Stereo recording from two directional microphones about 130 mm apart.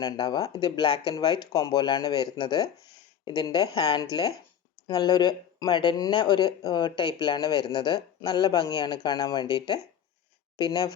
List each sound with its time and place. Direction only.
0.0 s speech: 30° left (ahead or behind)